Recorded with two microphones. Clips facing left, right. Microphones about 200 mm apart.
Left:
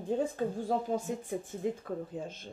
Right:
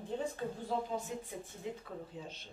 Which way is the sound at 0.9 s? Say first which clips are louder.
Left 7 dB; 50° left (ahead or behind).